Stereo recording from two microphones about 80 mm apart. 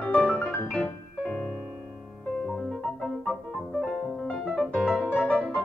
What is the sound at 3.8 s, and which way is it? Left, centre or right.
Music, centre.